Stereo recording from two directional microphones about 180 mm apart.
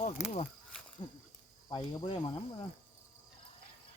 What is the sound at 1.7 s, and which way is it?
Speech, 25° left (ahead or behind).